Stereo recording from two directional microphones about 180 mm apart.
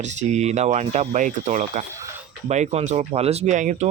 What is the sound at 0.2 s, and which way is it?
Speech, 40° right (ahead or behind).